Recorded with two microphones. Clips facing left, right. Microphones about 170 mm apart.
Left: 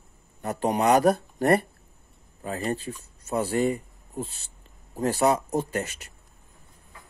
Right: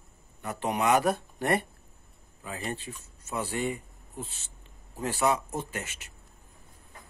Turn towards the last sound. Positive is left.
turn(degrees=40)  # may be behind; listen again after turning